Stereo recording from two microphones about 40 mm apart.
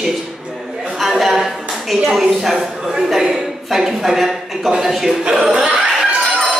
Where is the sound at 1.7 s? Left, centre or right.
Centre.